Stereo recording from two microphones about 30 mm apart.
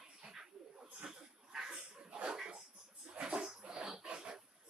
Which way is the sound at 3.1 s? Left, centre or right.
Right.